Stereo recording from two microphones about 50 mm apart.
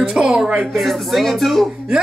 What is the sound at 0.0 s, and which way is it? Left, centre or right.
Speech, centre.